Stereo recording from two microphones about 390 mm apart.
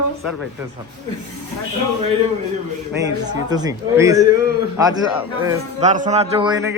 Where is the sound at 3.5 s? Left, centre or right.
Centre.